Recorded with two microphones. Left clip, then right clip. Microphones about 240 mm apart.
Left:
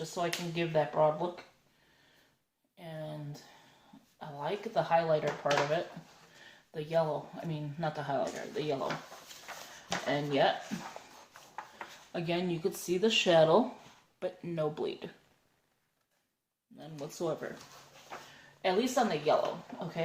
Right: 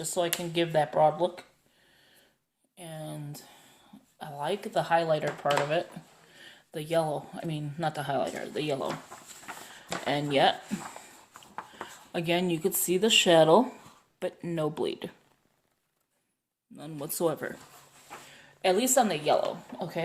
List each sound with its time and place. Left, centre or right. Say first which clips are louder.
0.0 s speech: right 5 dB; right
2.7 s a sound: right 2 dB; right
4.2 s speech: right 4 dB; right
10.1 s speech: right 5 dB; right
12.1 s speech: right 6 dB; right
16.7 s speech: right 5 dB; right
18.6 s speech: right 5 dB; right
19.7 s speech: right 5 dB; centre